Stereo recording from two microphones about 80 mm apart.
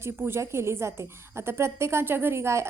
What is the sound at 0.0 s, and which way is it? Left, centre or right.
A woman's voice, right.